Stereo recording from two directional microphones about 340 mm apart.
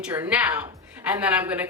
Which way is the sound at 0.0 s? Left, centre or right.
Centre.